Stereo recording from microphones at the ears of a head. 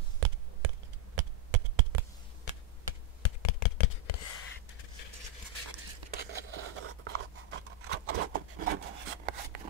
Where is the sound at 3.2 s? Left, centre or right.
Left.